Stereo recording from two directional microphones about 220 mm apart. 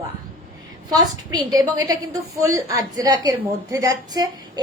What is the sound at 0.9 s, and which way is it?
A woman's voice, 15° right (ahead or behind).